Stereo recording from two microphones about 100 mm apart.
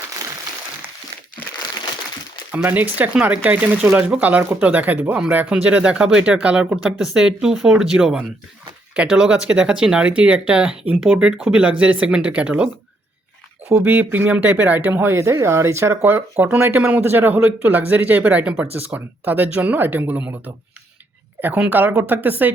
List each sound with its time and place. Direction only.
2.5 s speech: 15° right (ahead or behind)